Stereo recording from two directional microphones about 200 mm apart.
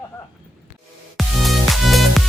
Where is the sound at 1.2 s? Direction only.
Centre (ahead or behind).